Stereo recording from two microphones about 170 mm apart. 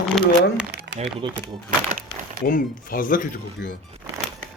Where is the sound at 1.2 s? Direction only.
30° right (ahead or behind).